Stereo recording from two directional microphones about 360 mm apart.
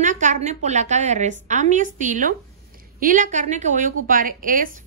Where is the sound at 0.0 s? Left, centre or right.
Right.